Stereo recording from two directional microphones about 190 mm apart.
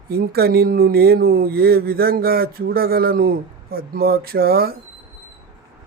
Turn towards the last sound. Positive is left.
turn(degrees=-55)  # may be behind; listen again after turning